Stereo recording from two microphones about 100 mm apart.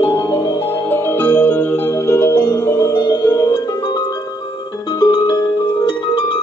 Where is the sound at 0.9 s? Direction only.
20° left (ahead or behind); by 3.3 s 40° left (ahead or behind).